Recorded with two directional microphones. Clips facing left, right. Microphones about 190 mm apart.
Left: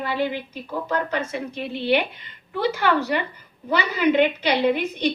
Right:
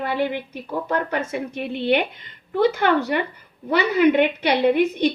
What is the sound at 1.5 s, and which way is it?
A woman's voice, 55° right (ahead or behind).